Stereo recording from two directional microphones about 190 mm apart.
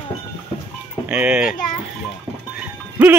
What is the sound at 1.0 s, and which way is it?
Speech, 5° right (ahead or behind).